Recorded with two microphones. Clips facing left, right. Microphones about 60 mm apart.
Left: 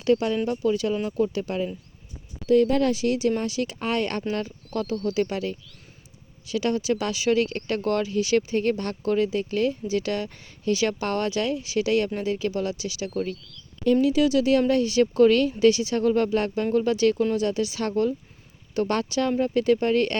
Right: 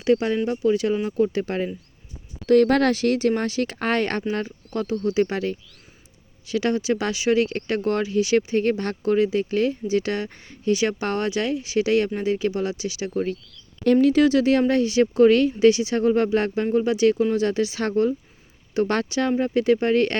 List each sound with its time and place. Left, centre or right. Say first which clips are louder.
0.0 s speech: right 2 dB; right
2.5 s speech: right 3 dB; right
13.8 s speech: right 3 dB; right
17.3 s speech: right 3 dB; right